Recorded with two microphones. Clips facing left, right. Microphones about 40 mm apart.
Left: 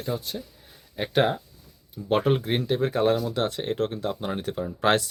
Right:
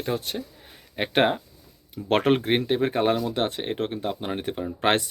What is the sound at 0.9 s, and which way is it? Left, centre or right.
Speech, right.